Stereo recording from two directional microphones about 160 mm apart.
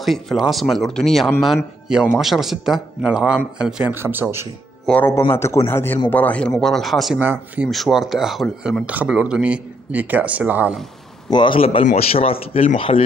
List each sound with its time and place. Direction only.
0.0 s speech: centre (ahead or behind)
4.8 s speech: 10° left (ahead or behind)
7.2 s speech: 10° right (ahead or behind)
11.2 s speech: 30° left (ahead or behind)